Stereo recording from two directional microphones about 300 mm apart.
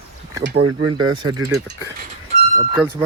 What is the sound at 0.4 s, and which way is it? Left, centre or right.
Speech, right.